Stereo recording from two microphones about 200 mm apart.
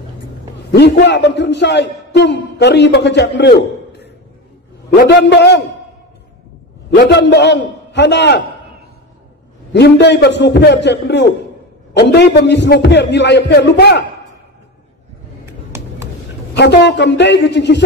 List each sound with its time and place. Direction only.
0.7 s a man's voice: 60° left (ahead or behind)
7.1 s a man's voice: 60° left (ahead or behind)
9.7 s a man's voice: 60° left (ahead or behind)
15.4 s a sound: 15° right (ahead or behind)
16.5 s a man's voice: 60° left (ahead or behind)